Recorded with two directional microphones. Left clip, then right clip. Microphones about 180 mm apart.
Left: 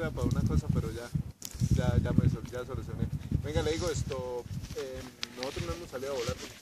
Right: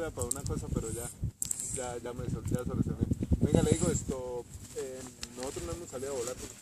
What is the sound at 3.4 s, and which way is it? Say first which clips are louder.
Speech: right 2 dB; 45° right (ahead or behind).